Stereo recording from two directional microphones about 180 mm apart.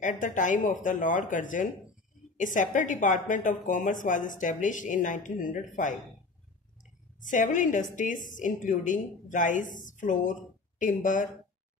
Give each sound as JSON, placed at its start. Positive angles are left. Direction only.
{"t": 0.0, "sound": "a woman's voice", "side_deg": 45}
{"t": 7.2, "sound": "a woman's voice", "side_deg": 45}